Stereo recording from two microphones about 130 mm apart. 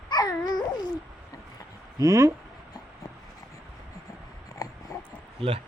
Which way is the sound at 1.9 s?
25° right (ahead or behind).